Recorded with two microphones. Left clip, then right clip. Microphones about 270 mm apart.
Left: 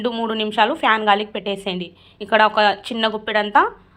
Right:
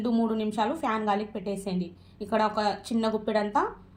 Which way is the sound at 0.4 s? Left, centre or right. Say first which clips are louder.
Left 11 dB; left.